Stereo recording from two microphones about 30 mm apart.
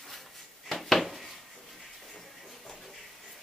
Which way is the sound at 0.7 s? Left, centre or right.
Centre.